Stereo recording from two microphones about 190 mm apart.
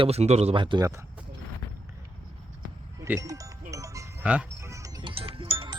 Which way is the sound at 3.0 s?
15° right (ahead or behind).